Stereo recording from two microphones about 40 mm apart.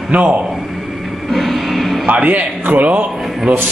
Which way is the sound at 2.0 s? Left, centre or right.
Right.